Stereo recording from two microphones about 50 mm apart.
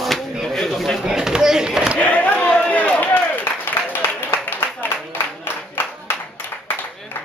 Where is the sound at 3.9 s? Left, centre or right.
Left.